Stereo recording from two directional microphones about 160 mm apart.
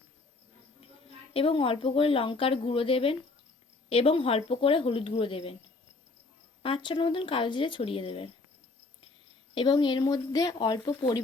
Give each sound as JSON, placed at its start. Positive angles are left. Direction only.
{"t": 1.3, "sound": "a woman's voice", "side_deg": 35}
{"t": 6.6, "sound": "a woman's voice", "side_deg": 30}
{"t": 9.6, "sound": "speech", "side_deg": 30}